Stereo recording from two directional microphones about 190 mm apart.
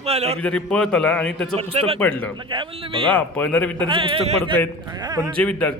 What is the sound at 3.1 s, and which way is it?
Speech, 10° left (ahead or behind).